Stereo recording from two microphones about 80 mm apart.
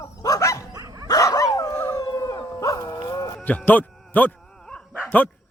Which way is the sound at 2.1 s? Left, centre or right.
Left.